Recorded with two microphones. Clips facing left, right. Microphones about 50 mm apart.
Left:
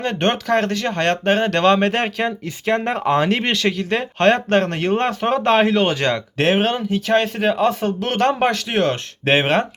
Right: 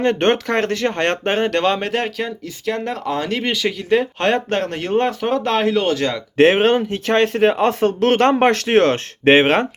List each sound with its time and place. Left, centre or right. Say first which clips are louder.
0.0 s speech: right 4 dB; right
1.2 s speech: left 3 dB; centre
1.8 s speech: left 2 dB; centre
2.2 s speech: left 3 dB; left
3.1 s speech: left 4 dB; centre
3.5 s speech: right 2 dB; centre
6.3 s speech: right 8 dB; right
9.2 s speech: right 4 dB; right